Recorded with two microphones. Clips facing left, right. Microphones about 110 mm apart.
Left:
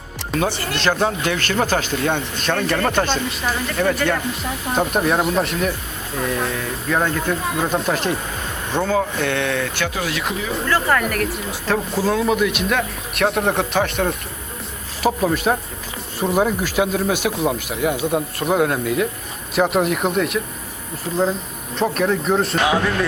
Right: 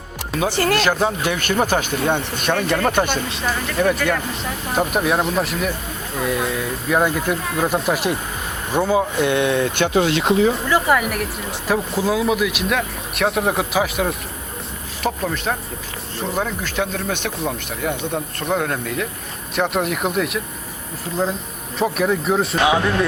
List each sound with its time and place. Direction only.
0.3 s speech: 10° right (ahead or behind)
0.6 s speech: 45° right (ahead or behind)
0.9 s speech: centre (ahead or behind)
1.3 s speech: 15° right (ahead or behind)
3.3 s speech: 5° right (ahead or behind); by 10.5 s 30° right (ahead or behind)
10.7 s speech: 10° right (ahead or behind)
15.0 s speech: 10° left (ahead or behind)
21.8 s speech: 5° right (ahead or behind)
22.6 s speech: 15° right (ahead or behind)